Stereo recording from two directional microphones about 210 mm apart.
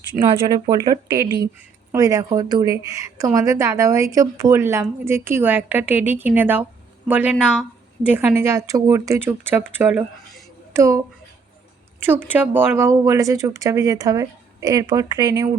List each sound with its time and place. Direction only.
0.4 s a woman's voice: 20° right (ahead or behind)
12.0 s a woman's voice: 10° right (ahead or behind)